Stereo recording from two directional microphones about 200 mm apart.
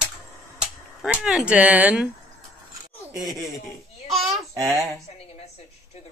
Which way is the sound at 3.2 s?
20° right (ahead or behind).